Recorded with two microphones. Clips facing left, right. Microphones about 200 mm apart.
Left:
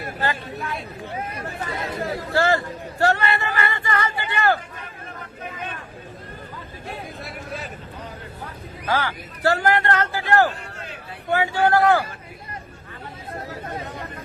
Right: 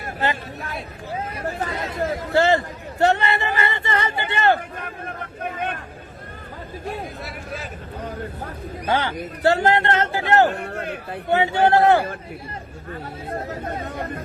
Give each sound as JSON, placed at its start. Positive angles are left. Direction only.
{"t": 0.2, "sound": "a man's voice", "side_deg": -20}
{"t": 2.3, "sound": "a sound", "side_deg": -20}
{"t": 4.8, "sound": "a sound", "side_deg": -55}
{"t": 7.2, "sound": "speech", "side_deg": 0}
{"t": 8.9, "sound": "a man's voice", "side_deg": -25}
{"t": 10.5, "sound": "a man's voice", "side_deg": -60}
{"t": 11.3, "sound": "a man's voice", "side_deg": -25}